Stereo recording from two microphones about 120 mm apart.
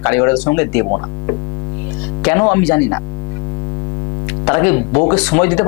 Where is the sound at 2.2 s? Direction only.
20° left (ahead or behind).